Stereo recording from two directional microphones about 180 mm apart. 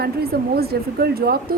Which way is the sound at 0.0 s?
60° right (ahead or behind).